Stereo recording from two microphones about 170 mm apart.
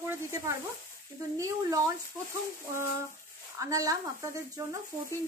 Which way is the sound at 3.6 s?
20° right (ahead or behind).